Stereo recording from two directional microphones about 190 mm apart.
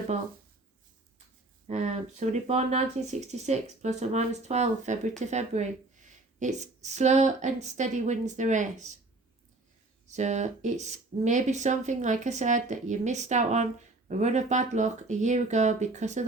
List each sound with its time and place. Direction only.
1.6 s a woman's voice: 35° right (ahead or behind)
10.1 s a woman's voice: 40° right (ahead or behind)